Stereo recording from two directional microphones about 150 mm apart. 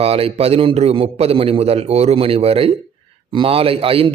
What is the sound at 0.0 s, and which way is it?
A man's voice, 40° right (ahead or behind).